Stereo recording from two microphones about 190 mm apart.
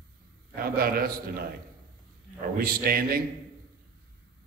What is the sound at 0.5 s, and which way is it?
Speech, 50° right (ahead or behind).